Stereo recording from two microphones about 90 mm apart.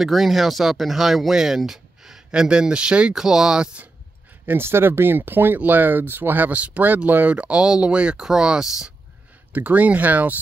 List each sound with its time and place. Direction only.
0.0 s speech: centre (ahead or behind)
4.5 s speech: 25° right (ahead or behind); by 8.9 s 10° right (ahead or behind)
9.5 s speech: 20° right (ahead or behind)